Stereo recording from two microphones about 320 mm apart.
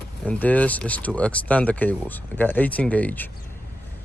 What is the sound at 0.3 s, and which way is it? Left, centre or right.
Speech, centre.